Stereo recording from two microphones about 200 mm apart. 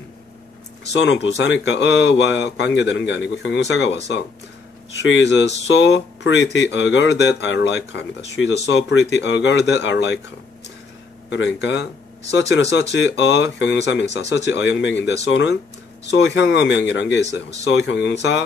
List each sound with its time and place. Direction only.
1.2 s speech: 65° left (ahead or behind)
11.2 s speech: 65° left (ahead or behind)